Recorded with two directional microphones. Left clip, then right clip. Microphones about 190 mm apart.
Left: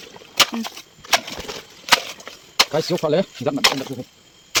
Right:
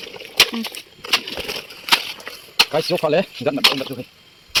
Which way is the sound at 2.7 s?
25° left (ahead or behind).